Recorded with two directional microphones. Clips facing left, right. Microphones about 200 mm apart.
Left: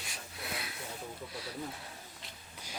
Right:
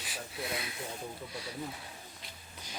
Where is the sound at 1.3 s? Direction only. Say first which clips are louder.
Right 1 dB; centre (ahead or behind).